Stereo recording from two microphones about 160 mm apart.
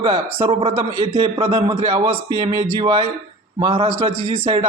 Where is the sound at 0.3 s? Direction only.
35° right (ahead or behind).